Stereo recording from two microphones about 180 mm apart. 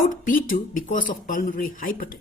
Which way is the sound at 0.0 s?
50° left (ahead or behind).